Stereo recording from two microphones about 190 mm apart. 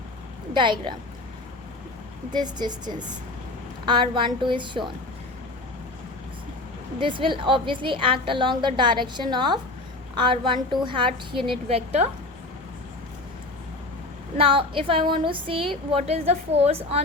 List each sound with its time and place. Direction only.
0.5 s a woman's voice: 25° right (ahead or behind)
2.3 s a woman's voice: 20° right (ahead or behind)
7.0 s a woman's voice: 25° right (ahead or behind)
14.3 s a woman's voice: 30° right (ahead or behind)